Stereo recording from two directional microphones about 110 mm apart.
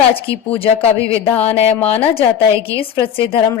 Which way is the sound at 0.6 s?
60° left (ahead or behind).